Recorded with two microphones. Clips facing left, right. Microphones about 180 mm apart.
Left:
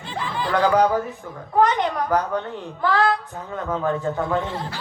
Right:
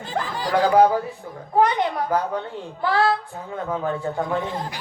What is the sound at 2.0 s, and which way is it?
A man's voice, 20° right (ahead or behind).